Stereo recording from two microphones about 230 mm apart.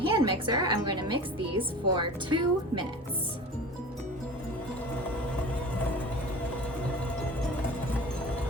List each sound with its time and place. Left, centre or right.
0.0 s a woman's voice: right